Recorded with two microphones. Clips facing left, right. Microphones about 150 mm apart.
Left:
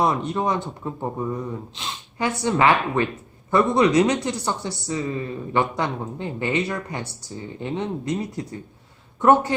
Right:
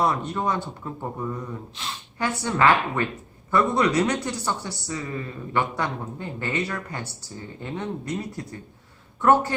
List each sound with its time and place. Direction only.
0.0 s speech: 20° left (ahead or behind)